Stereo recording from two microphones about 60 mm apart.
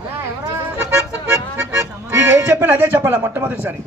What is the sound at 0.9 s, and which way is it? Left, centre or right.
A man's voice, right.